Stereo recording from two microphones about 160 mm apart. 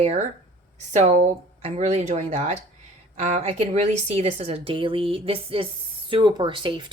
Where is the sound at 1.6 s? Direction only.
45° right (ahead or behind).